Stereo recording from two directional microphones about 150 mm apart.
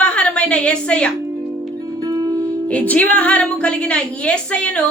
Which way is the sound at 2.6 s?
10° left (ahead or behind).